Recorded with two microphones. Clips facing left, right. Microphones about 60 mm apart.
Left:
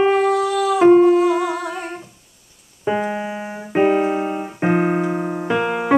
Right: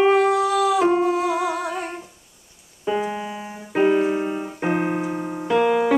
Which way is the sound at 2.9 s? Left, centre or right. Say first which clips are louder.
Left 3 dB; left.